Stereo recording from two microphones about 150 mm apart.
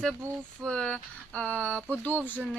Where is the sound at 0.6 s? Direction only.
5° left (ahead or behind).